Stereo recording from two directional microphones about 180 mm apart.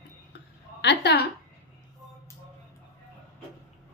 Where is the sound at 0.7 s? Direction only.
70° left (ahead or behind).